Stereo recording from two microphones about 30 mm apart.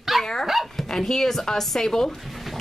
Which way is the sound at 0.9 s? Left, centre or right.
Centre.